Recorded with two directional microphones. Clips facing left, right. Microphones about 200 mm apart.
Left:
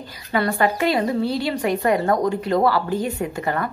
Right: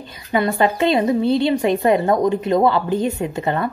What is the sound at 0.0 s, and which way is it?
A woman's voice, 20° right (ahead or behind).